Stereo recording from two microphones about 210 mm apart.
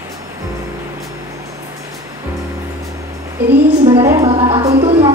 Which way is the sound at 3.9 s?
15° right (ahead or behind).